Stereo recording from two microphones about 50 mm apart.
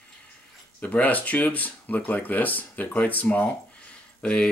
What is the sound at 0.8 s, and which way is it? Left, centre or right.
Speech, left.